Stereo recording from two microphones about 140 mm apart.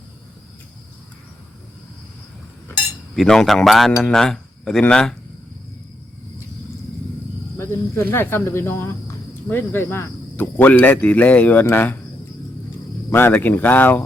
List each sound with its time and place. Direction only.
3.2 s speech: centre (ahead or behind)
7.5 s speech: 15° left (ahead or behind)
13.1 s speech: 15° left (ahead or behind)